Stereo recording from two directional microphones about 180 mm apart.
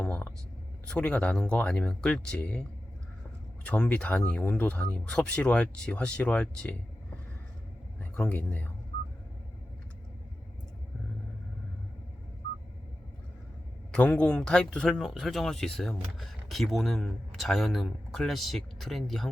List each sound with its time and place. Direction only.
0.0 s speech: 10° left (ahead or behind)
3.7 s speech: 5° left (ahead or behind)
7.9 s speech: 10° left (ahead or behind)
13.9 s speech: 5° left (ahead or behind)